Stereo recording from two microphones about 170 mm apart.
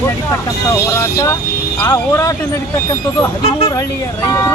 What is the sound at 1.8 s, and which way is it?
Speech, 20° left (ahead or behind).